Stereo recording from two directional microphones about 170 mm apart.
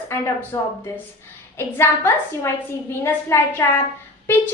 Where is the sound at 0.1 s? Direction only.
10° left (ahead or behind).